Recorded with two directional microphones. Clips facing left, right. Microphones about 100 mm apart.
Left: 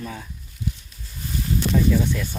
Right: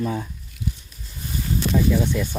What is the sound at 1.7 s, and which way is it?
Speech, 10° right (ahead or behind).